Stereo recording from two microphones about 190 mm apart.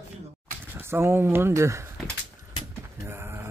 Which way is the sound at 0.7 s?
10° right (ahead or behind).